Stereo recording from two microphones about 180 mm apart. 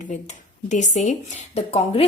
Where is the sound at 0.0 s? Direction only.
40° left (ahead or behind).